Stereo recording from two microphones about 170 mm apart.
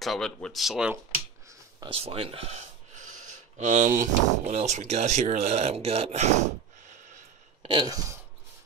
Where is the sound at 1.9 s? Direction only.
35° right (ahead or behind).